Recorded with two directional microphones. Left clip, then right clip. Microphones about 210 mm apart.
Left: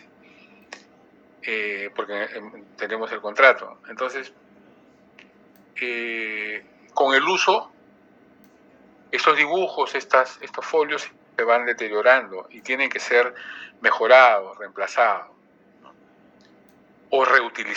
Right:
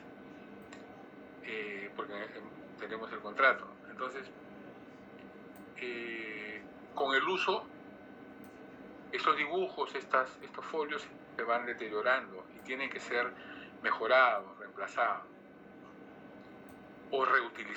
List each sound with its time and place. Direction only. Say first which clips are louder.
1.4 s speech: left 14 dB; 45° left (ahead or behind)
5.7 s speech: left 14 dB; 45° left (ahead or behind)
9.0 s speech: left 13 dB; 45° left (ahead or behind)
17.1 s speech: left 12 dB; 45° left (ahead or behind)